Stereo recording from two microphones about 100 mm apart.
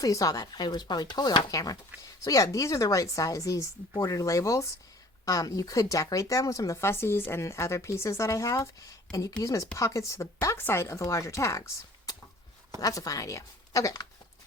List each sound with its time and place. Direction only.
0.0 s speech: 35° left (ahead or behind)